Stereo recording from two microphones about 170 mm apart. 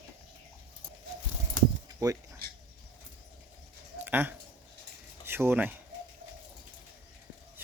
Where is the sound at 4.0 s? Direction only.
10° right (ahead or behind).